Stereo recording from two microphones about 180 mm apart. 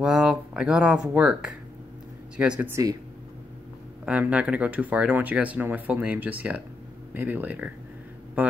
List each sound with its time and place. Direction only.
0.0 s speech: 5° right (ahead or behind)
4.0 s speech: 10° right (ahead or behind)